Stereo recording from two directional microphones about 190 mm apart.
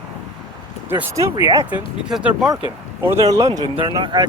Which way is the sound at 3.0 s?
15° right (ahead or behind).